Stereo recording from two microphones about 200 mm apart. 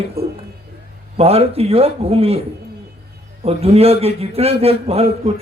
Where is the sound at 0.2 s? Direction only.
50° right (ahead or behind).